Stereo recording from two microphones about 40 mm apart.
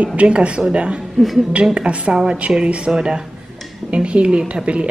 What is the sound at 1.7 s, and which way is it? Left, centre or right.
Speech, right.